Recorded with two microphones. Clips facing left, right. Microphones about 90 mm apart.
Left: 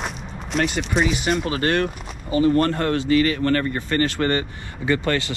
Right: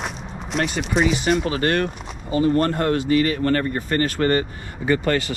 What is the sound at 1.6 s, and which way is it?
Speech, 40° right (ahead or behind).